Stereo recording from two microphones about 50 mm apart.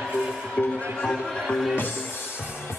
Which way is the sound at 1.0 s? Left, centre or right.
Centre.